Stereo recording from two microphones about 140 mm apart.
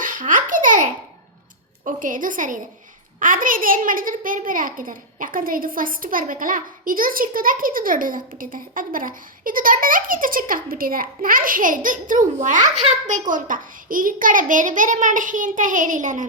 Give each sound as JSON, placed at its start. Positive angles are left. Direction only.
{"t": 0.0, "sound": "babbling", "side_deg": -70}
{"t": 1.8, "sound": "a child's voice", "side_deg": -70}